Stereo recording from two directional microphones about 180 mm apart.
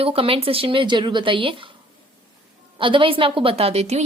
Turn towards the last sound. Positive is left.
turn(degrees=-35)  # may be behind; listen again after turning